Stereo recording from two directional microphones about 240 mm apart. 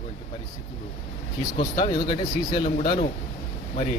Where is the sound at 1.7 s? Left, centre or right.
Centre.